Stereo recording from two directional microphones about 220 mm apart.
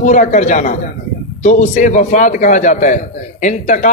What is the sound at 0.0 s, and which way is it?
A man's voice, 35° left (ahead or behind).